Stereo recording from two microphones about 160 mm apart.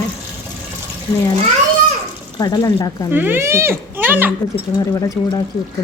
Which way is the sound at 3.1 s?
15° right (ahead or behind).